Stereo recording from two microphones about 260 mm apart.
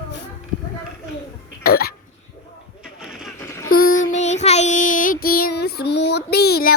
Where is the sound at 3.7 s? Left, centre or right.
Left.